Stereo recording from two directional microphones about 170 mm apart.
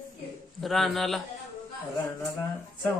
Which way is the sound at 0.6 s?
Centre (ahead or behind).